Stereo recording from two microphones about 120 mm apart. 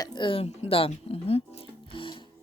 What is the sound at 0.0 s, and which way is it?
Speech, 40° left (ahead or behind).